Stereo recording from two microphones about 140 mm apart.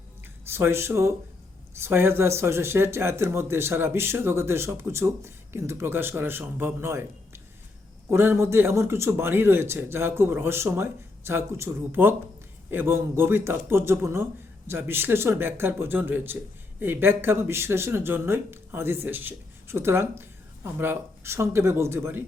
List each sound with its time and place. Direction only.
0.4 s speech: 15° right (ahead or behind)